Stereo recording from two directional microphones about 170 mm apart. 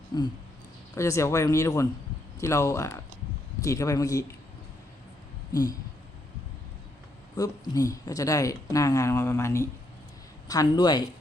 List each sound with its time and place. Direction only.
0.1 s speech: 25° left (ahead or behind)
7.3 s speech: 20° left (ahead or behind)